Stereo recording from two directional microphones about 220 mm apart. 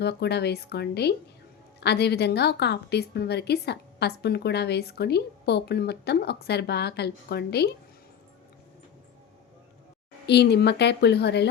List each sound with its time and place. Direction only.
0.0 s a woman's voice: 50° left (ahead or behind)
10.2 s a woman's voice: 50° left (ahead or behind)